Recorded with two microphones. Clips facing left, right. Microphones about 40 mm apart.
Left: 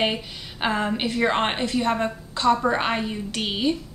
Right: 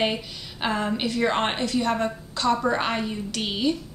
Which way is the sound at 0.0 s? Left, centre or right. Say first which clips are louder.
Left 1 dB; centre.